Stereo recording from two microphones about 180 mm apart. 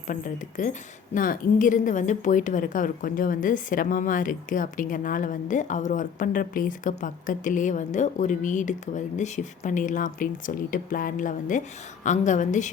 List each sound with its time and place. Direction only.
0.1 s a woman's voice: 45° left (ahead or behind)